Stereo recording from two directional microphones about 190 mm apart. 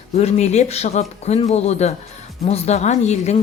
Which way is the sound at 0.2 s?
35° left (ahead or behind).